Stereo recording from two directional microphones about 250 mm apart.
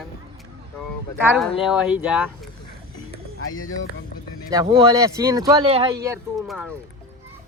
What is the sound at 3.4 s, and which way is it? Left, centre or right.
Speech, left.